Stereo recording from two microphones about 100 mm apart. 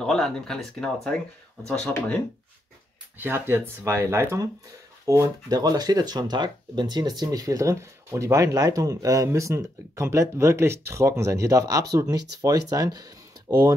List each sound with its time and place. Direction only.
0.0 s speech: 5° left (ahead or behind)
3.2 s speech: 25° right (ahead or behind); by 13.7 s 40° right (ahead or behind)